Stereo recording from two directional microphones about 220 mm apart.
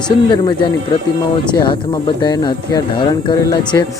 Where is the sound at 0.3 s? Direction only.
20° left (ahead or behind).